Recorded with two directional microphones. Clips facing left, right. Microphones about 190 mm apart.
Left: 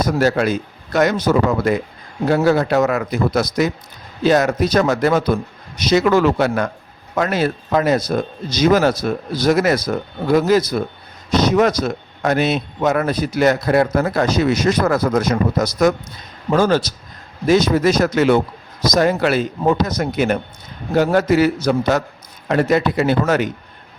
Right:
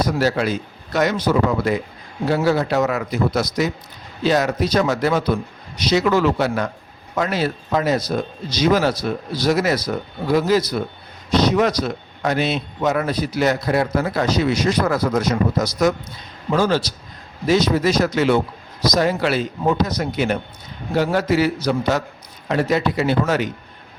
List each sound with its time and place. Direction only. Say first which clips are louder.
0.0 s a man's voice: left 3 dB; 50° left (ahead or behind)